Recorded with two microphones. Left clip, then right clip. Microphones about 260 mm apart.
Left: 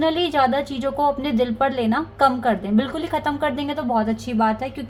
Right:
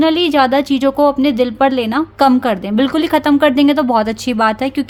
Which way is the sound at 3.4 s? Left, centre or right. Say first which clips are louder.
Right 12 dB; right.